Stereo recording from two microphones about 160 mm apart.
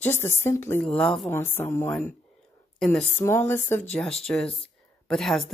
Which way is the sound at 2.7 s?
5° left (ahead or behind).